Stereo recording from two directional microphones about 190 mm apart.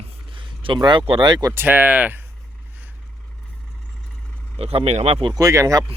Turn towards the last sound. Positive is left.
turn(degrees=-15)  # may be behind; listen again after turning